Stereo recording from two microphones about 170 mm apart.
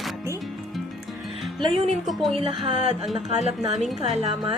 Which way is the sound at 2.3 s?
35° right (ahead or behind).